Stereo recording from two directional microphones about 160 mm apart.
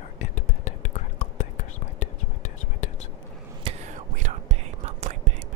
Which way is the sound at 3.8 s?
50° right (ahead or behind).